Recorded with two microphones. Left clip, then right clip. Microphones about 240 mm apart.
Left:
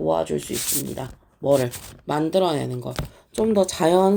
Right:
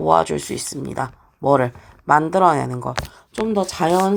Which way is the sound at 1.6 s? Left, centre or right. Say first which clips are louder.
Right 5 dB; centre.